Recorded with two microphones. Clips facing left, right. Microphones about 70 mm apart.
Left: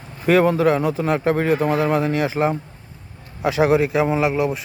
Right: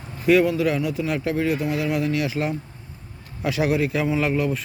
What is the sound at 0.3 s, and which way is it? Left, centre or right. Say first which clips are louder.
A man's voice: left 3 dB; left.